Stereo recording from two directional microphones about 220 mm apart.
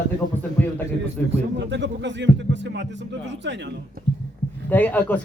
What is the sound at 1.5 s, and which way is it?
Speech, 55° right (ahead or behind).